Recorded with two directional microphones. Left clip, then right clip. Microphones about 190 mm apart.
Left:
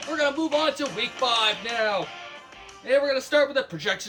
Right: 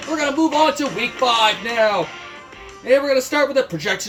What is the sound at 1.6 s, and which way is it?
Music, 20° left (ahead or behind).